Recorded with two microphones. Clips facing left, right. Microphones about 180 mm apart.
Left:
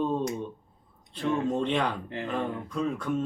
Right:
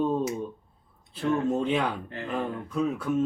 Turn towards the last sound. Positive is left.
turn(degrees=-5)  # may be behind; listen again after turning